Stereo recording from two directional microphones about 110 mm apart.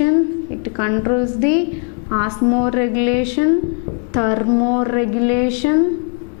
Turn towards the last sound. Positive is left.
turn(degrees=10)  # may be behind; listen again after turning